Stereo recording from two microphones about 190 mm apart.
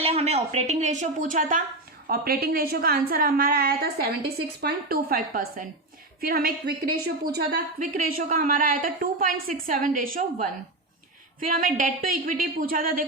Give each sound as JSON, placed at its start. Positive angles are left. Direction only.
{"t": 0.0, "sound": "speech", "side_deg": -35}
{"t": 2.0, "sound": "a woman's voice", "side_deg": -55}
{"t": 11.3, "sound": "a woman's voice", "side_deg": -45}